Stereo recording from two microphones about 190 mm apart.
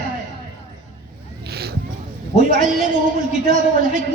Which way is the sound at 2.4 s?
45° right (ahead or behind).